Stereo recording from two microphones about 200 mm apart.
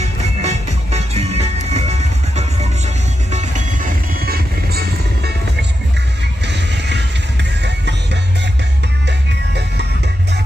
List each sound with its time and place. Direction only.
0.0 s music: 35° right (ahead or behind); by 8.2 s 60° right (ahead or behind)